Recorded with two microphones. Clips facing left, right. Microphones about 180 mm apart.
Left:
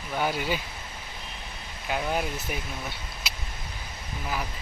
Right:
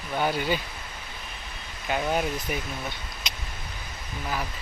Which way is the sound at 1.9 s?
Centre (ahead or behind).